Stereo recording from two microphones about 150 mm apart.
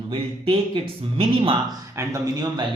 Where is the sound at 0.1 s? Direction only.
35° right (ahead or behind).